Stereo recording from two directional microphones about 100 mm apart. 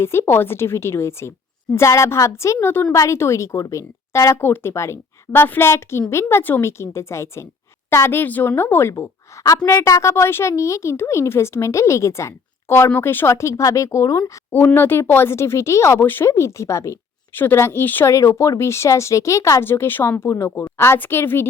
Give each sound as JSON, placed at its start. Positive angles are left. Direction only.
{"t": 0.0, "sound": "speech", "side_deg": 25}
{"t": 14.5, "sound": "speech", "side_deg": 20}